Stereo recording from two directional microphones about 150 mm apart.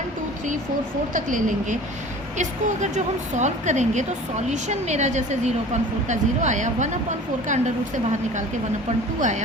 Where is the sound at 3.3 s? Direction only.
50° right (ahead or behind).